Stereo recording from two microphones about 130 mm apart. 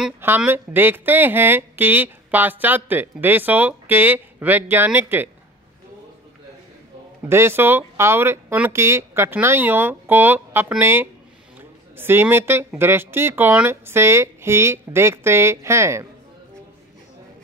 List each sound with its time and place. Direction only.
0.4 s speech: 15° right (ahead or behind)
7.2 s speech: 20° right (ahead or behind)